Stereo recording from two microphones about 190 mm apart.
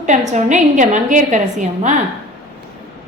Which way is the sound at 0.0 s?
40° right (ahead or behind).